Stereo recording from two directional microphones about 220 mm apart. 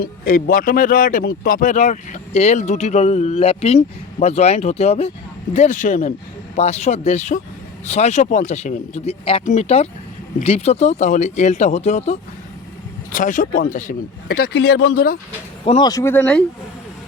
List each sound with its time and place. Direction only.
0.0 s speech: 40° left (ahead or behind)
15.6 s speech: 20° left (ahead or behind)